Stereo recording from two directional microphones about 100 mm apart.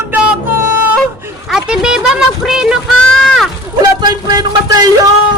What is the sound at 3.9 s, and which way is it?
Music, 45° right (ahead or behind).